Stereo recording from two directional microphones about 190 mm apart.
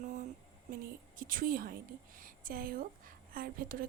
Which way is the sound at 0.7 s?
45° right (ahead or behind).